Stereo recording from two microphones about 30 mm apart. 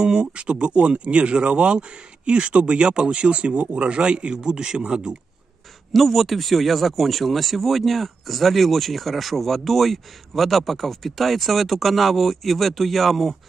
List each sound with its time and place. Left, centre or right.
0.0 s speech: right
3.2 s speech: right
5.9 s speech: centre